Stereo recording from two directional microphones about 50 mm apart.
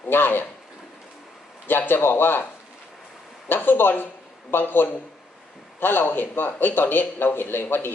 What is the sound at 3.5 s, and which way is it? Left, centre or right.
Speech, left.